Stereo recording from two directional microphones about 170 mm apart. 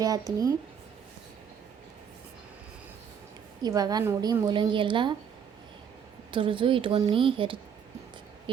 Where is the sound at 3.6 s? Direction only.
20° right (ahead or behind).